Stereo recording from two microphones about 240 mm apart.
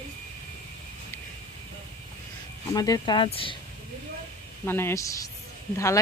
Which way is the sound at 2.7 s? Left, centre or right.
Centre.